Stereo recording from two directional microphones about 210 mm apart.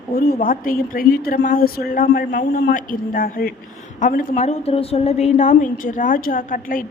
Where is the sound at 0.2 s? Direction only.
40° left (ahead or behind).